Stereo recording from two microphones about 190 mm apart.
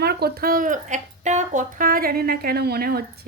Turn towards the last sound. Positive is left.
turn(degrees=-55)  # may be behind; listen again after turning